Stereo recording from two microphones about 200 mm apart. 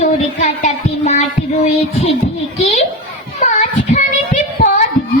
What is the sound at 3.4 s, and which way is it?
Child singing, 35° left (ahead or behind).